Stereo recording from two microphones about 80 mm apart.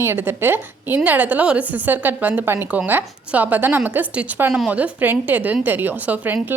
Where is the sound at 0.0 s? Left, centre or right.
Right.